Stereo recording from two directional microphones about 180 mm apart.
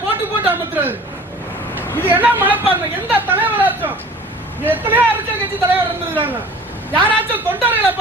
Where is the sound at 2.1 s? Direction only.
10° right (ahead or behind).